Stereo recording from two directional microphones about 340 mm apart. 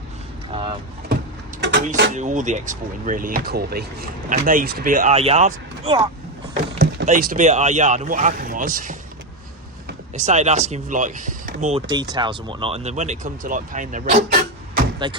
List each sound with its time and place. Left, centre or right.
0.5 s vehicle: centre
1.6 s speech: right
10.2 s speech: right